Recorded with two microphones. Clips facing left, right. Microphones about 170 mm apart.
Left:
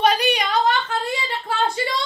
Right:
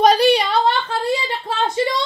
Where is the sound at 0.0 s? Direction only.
35° right (ahead or behind).